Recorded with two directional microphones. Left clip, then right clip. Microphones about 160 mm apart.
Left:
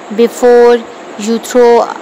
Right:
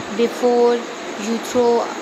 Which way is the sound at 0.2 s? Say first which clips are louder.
Left 10 dB; 50° left (ahead or behind).